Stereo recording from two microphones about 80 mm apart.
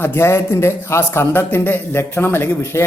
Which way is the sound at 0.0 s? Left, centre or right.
Left.